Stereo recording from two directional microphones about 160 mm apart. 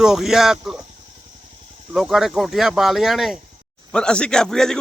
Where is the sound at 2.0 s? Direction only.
Centre (ahead or behind).